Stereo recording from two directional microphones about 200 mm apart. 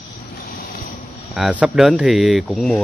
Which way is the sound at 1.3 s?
5° right (ahead or behind).